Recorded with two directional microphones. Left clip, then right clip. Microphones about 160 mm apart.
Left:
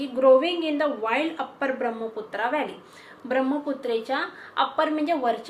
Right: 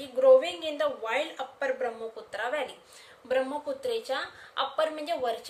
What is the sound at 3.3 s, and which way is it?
A woman's voice, 60° right (ahead or behind).